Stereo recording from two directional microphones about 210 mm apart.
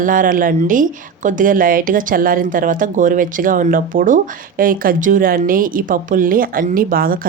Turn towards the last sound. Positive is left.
turn(degrees=-45)  # may be behind; listen again after turning